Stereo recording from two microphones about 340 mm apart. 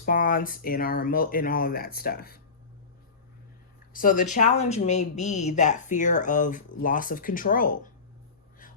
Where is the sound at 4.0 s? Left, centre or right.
Left.